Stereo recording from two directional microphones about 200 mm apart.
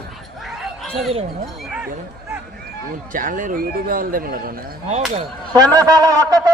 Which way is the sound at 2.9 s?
40° right (ahead or behind).